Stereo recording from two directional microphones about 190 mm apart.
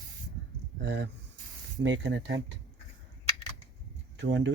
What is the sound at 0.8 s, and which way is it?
Speech, 70° right (ahead or behind).